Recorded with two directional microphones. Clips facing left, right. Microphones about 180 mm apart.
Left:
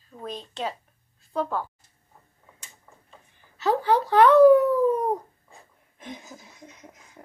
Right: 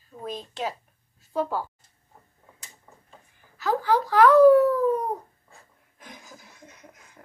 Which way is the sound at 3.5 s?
25° left (ahead or behind).